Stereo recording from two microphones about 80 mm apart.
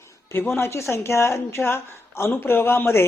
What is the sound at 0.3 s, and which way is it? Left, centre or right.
Speech, left.